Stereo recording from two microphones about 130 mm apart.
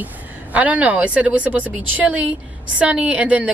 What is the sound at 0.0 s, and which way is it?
A woman's voice, 10° right (ahead or behind).